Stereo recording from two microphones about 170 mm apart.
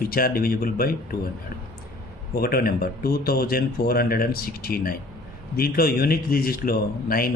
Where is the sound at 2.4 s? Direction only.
65° left (ahead or behind).